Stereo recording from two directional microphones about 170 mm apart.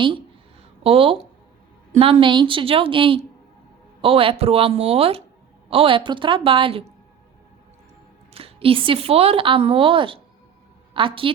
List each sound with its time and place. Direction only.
0.9 s a woman's voice: 35° right (ahead or behind)
8.3 s a woman's voice: 35° right (ahead or behind)